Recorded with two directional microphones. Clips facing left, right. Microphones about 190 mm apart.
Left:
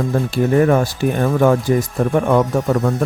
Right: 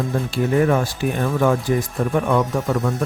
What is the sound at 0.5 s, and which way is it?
Speech, 45° left (ahead or behind).